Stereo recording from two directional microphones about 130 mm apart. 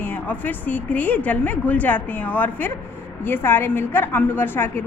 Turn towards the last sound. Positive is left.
turn(degrees=15)  # may be behind; listen again after turning